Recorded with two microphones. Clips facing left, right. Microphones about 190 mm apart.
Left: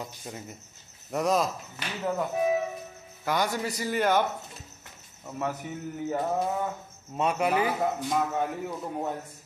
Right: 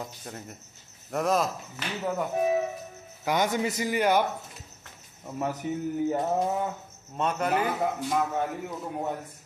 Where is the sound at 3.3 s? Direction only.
20° right (ahead or behind).